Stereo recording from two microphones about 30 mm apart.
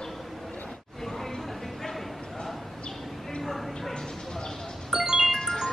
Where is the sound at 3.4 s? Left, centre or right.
Centre.